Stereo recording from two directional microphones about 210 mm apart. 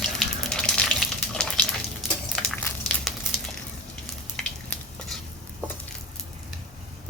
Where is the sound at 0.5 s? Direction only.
5° left (ahead or behind).